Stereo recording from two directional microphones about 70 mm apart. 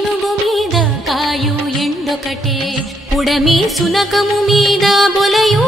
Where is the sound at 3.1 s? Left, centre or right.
Centre.